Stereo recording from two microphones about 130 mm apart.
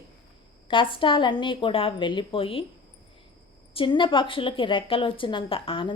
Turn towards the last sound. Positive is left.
turn(degrees=45)  # may be behind; listen again after turning